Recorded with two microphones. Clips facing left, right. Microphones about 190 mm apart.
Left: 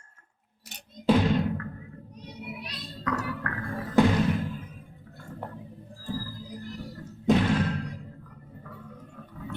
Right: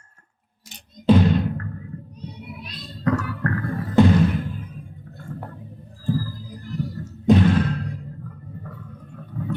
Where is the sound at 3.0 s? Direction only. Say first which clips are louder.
Right 8 dB; 40° right (ahead or behind).